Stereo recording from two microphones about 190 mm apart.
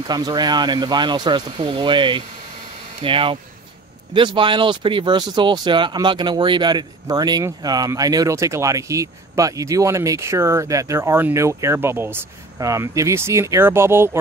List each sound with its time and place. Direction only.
0.0 s speech: 20° right (ahead or behind)